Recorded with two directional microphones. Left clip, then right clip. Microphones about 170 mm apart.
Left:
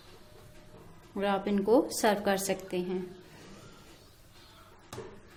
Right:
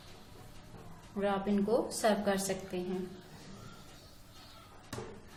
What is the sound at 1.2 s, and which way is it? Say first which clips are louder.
A woman's voice: left 3 dB; 55° left (ahead or behind).